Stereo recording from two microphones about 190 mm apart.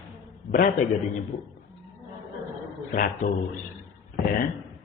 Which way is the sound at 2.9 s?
45° left (ahead or behind).